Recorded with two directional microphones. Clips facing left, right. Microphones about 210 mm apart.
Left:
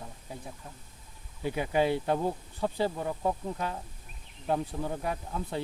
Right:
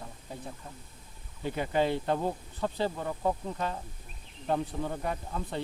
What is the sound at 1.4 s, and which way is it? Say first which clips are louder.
Speech: left 1 dB; 10° left (ahead or behind).